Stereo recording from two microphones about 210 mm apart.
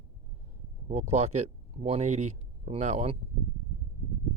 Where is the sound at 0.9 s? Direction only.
30° right (ahead or behind).